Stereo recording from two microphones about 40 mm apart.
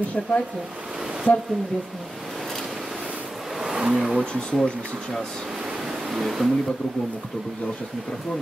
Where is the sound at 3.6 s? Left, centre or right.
Centre.